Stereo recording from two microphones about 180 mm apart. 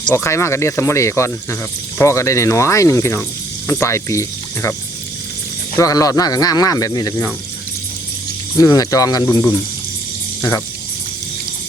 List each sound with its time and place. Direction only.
0.1 s speech: 15° left (ahead or behind)
5.7 s speech: 20° left (ahead or behind)
8.5 s speech: 20° left (ahead or behind)